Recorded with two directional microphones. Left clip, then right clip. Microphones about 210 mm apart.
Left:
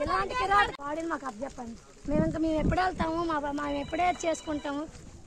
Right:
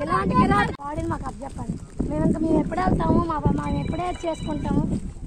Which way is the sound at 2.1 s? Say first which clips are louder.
Right 5 dB; 55° left (ahead or behind).